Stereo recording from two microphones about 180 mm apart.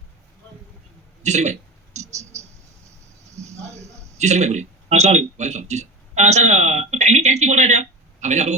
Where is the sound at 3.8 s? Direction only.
15° right (ahead or behind).